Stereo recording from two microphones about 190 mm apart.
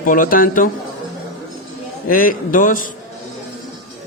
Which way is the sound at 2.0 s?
50° left (ahead or behind).